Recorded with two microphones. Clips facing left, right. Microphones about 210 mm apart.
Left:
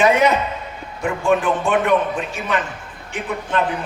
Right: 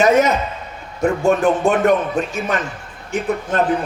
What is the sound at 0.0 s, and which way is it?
Speech, 45° right (ahead or behind).